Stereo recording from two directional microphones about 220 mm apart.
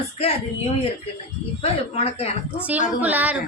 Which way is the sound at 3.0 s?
5° right (ahead or behind).